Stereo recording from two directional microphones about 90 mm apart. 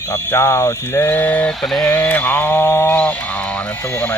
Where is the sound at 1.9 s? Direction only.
20° left (ahead or behind).